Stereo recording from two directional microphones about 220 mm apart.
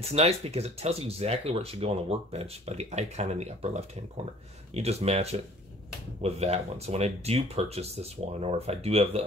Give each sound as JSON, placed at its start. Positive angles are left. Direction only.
{"t": 0.1, "sound": "speech", "side_deg": -30}